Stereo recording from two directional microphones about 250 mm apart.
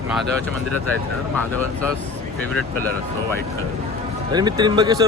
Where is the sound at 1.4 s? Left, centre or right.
Centre.